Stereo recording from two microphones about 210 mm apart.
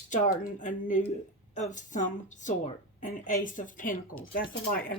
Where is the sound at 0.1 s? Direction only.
40° left (ahead or behind).